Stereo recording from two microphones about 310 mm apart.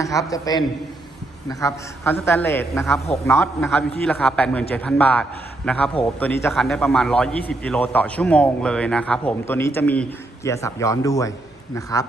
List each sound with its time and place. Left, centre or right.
0.0 s a man's voice: centre